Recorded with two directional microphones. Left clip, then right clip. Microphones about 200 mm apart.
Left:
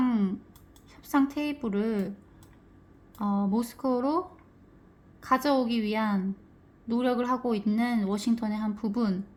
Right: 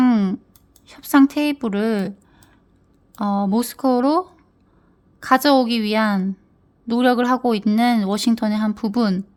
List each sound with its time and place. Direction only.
0.0 s a sound: 55° right (ahead or behind)
0.9 s a woman's voice: 55° right (ahead or behind)
3.2 s speech: 55° right (ahead or behind)
5.2 s speech: 55° right (ahead or behind)